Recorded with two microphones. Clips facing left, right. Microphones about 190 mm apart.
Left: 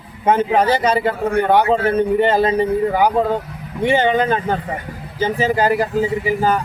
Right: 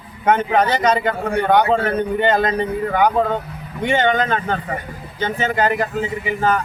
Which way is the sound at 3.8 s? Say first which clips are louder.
Left 2 dB; 30° left (ahead or behind).